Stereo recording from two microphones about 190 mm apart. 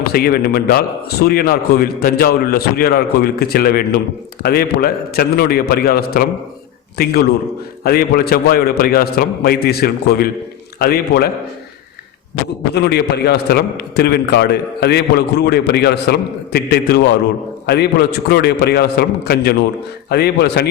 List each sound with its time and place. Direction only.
0.1 s a man's voice: 50° left (ahead or behind)
12.7 s a man's voice: 60° left (ahead or behind)
18.3 s a man's voice: 60° left (ahead or behind)